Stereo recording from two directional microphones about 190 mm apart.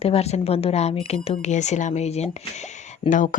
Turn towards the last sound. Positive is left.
turn(degrees=40)  # may be behind; listen again after turning